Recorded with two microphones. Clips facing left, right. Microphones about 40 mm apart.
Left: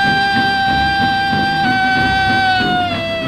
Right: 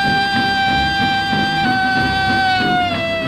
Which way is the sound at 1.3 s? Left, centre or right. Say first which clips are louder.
Left 2 dB; right.